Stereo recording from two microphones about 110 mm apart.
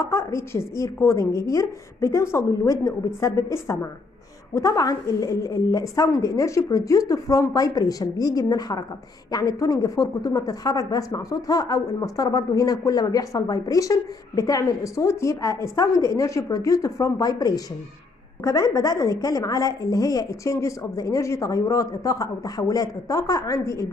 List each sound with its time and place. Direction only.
0.0 s a woman's voice: 25° left (ahead or behind)